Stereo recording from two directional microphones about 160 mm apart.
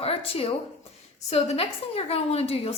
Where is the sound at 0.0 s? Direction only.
35° left (ahead or behind).